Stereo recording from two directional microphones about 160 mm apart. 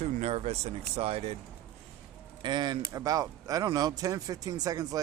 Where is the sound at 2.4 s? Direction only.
25° right (ahead or behind).